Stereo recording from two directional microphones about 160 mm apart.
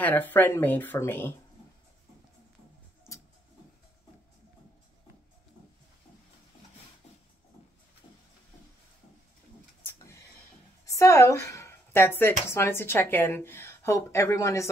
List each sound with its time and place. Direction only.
0.0 s speech: 10° left (ahead or behind)
10.9 s speech: 20° left (ahead or behind)